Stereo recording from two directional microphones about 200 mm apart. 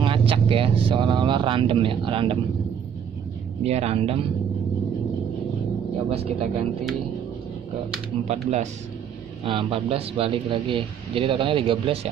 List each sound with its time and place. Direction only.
0.0 s a man's voice: 25° right (ahead or behind)
3.6 s speech: 30° right (ahead or behind)
6.0 s speech: 30° right (ahead or behind)
8.3 s a man's voice: 35° right (ahead or behind)